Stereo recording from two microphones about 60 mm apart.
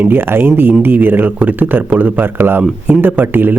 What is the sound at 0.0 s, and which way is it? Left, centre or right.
Speech, right.